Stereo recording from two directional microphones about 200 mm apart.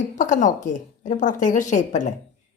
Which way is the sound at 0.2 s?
40° left (ahead or behind).